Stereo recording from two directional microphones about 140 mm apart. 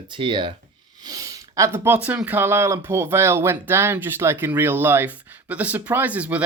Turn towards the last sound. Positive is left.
turn(degrees=-10)  # may be behind; listen again after turning